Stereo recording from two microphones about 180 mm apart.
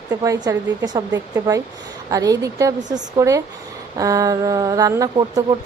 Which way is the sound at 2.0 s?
20° right (ahead or behind).